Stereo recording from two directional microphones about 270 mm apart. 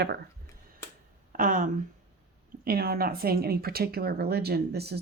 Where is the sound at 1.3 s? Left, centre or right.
Right.